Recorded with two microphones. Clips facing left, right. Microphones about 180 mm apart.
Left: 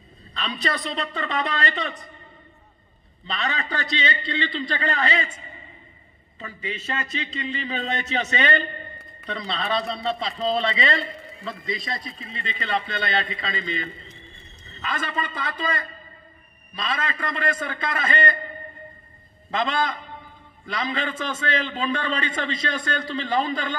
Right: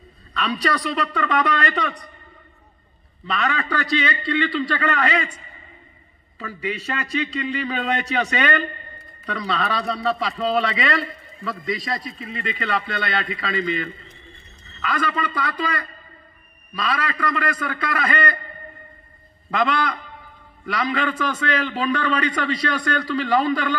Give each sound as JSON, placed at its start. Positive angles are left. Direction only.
{"t": 0.3, "sound": "a man's voice", "side_deg": 30}
{"t": 3.3, "sound": "a man's voice", "side_deg": 30}
{"t": 6.3, "sound": "a man's voice", "side_deg": 25}
{"t": 19.5, "sound": "a man's voice", "side_deg": 25}